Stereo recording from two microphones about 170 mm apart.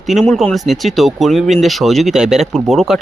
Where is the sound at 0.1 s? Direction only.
Centre (ahead or behind).